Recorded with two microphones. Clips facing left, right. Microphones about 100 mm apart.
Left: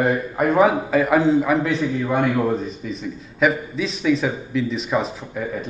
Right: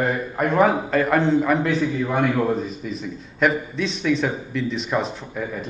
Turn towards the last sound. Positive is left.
turn(degrees=0)  # may be behind; listen again after turning